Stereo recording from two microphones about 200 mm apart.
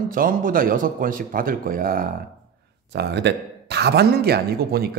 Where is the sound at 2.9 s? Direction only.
55° right (ahead or behind).